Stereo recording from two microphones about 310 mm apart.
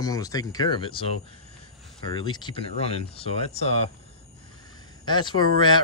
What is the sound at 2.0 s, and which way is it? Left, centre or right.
Speech, centre.